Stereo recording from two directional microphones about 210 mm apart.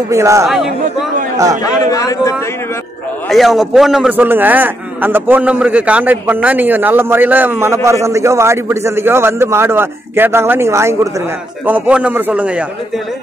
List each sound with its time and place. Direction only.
0.1 s a man's voice: 15° right (ahead or behind)
1.6 s a man's voice: 15° left (ahead or behind)
3.3 s a man's voice: centre (ahead or behind)